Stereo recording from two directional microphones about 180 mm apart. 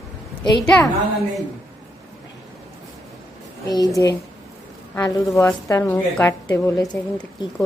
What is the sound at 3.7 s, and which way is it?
A woman's voice, 20° left (ahead or behind).